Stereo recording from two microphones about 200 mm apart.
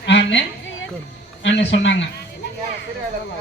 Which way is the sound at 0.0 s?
60° left (ahead or behind).